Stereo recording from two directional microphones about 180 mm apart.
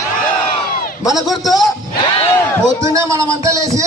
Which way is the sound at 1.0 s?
20° left (ahead or behind).